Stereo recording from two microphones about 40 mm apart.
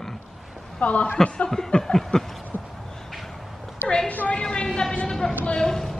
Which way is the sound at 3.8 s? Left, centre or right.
Centre.